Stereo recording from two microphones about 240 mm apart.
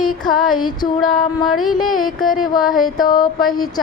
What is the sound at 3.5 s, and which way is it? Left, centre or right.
Speech, centre.